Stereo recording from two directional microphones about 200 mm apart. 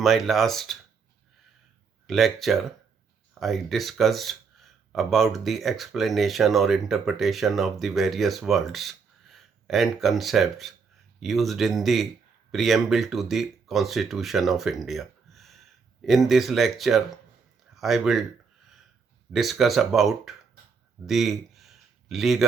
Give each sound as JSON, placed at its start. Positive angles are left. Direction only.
{"t": 0.0, "sound": "speech", "side_deg": 0}
{"t": 2.0, "sound": "speech", "side_deg": 0}
{"t": 19.3, "sound": "speech", "side_deg": 0}
{"t": 21.1, "sound": "a sound", "side_deg": 0}